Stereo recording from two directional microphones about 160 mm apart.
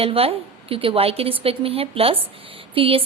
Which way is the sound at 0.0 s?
35° right (ahead or behind).